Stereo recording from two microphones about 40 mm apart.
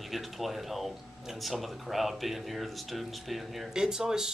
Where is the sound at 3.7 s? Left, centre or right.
Centre.